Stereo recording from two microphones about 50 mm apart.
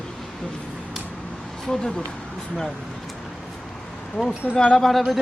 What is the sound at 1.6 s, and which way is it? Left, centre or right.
Speech, centre.